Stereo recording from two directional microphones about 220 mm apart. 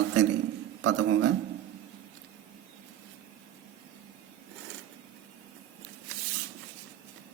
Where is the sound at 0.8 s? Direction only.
55° right (ahead or behind).